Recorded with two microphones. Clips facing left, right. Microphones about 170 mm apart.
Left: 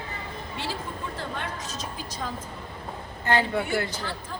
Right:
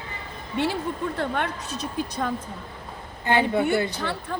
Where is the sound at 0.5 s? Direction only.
60° right (ahead or behind).